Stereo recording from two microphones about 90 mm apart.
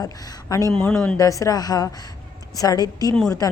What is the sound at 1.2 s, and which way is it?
A woman's voice, 40° left (ahead or behind).